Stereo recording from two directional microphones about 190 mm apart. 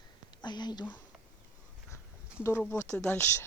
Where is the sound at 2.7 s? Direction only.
15° left (ahead or behind).